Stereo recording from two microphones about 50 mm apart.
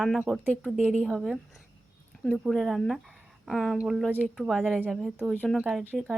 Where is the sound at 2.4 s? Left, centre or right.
Centre.